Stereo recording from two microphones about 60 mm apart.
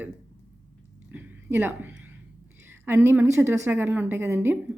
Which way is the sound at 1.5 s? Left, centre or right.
Right.